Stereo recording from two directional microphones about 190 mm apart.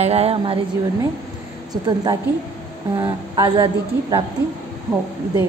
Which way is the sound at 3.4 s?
25° right (ahead or behind).